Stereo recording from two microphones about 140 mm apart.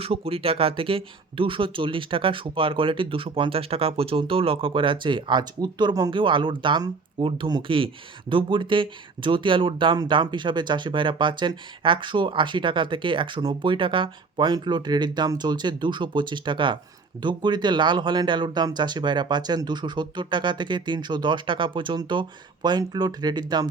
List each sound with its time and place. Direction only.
0.0 s speech: 45° right (ahead or behind)